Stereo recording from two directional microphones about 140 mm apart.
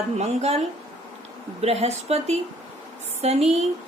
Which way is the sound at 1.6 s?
50° right (ahead or behind).